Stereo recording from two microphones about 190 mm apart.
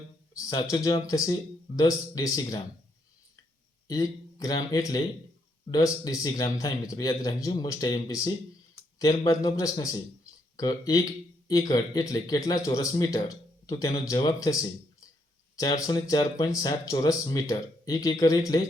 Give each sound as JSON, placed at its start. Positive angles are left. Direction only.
{"t": 0.3, "sound": "speech", "side_deg": 20}
{"t": 3.8, "sound": "speech", "side_deg": 20}